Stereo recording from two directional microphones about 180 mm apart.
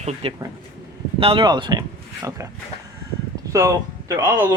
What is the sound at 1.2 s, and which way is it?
Speech, 25° right (ahead or behind).